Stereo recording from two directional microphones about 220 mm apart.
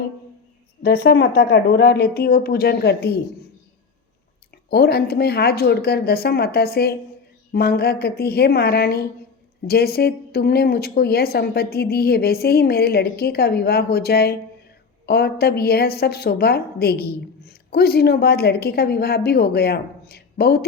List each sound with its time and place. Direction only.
0.8 s a woman's voice: 45° left (ahead or behind)
4.7 s a woman's voice: 45° left (ahead or behind)